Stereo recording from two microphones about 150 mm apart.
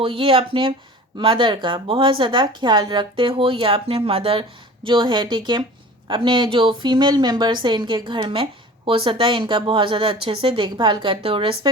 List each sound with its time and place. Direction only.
0.0 s a woman's voice: 35° right (ahead or behind)